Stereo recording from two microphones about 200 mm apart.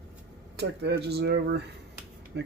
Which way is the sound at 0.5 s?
55° right (ahead or behind).